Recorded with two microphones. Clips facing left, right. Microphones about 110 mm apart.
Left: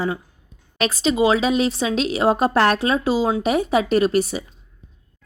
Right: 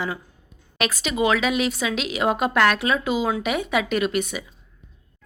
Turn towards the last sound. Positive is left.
turn(degrees=35)  # may be behind; listen again after turning